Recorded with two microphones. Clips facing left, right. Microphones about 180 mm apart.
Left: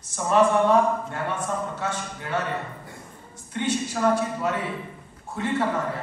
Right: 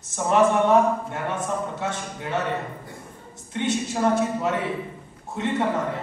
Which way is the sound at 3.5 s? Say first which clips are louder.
Right 1 dB; 20° right (ahead or behind).